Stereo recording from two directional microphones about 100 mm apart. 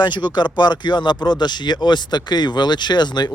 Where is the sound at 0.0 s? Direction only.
45° left (ahead or behind).